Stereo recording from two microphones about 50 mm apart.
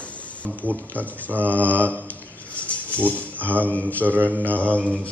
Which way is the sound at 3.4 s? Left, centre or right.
Right.